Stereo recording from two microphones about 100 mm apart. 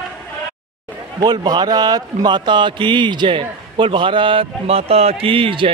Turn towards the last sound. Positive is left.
turn(degrees=-60)  # may be behind; listen again after turning